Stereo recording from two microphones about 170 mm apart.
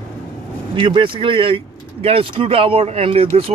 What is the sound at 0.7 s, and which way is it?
Speech, 30° right (ahead or behind).